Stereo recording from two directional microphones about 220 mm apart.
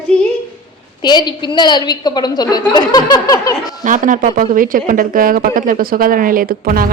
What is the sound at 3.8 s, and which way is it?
A woman's voice, 35° right (ahead or behind).